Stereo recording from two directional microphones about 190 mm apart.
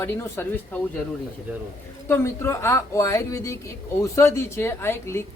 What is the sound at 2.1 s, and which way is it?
A woman's voice, 15° left (ahead or behind).